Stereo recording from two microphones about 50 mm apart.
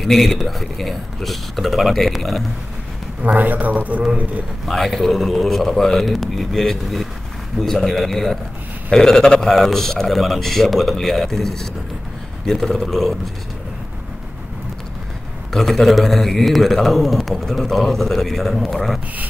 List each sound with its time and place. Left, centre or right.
0.0 s a man's voice: centre
3.2 s a man's voice: right
4.6 s a man's voice: centre
15.5 s a man's voice: centre